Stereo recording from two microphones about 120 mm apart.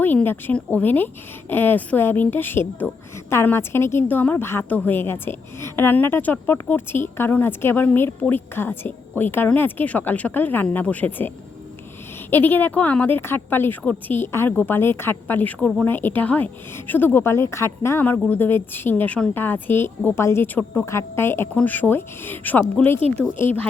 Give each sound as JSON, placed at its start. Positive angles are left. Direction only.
{"t": 0.0, "sound": "a woman's voice", "side_deg": 15}
{"t": 12.3, "sound": "a woman's voice", "side_deg": 15}